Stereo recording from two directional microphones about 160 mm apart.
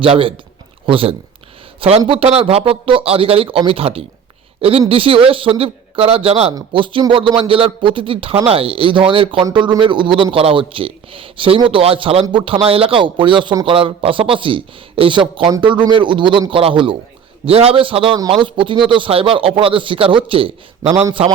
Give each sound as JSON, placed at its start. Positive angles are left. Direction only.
{"t": 0.0, "sound": "a man's voice", "side_deg": -35}
{"t": 6.5, "sound": "a man's voice", "side_deg": -25}